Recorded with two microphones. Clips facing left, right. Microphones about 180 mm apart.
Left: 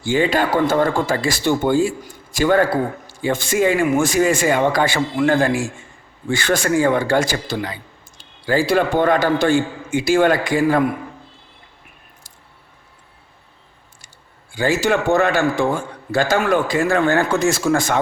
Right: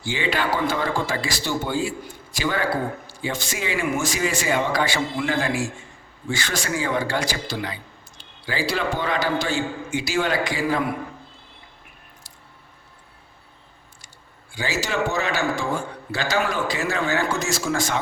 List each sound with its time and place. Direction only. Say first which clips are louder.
0.0 s a man's voice: left 7 dB; 45° left (ahead or behind)
14.5 s a man's voice: left 8 dB; 55° left (ahead or behind)